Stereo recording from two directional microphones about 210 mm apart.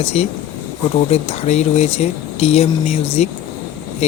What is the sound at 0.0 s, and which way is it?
Speech, 30° left (ahead or behind).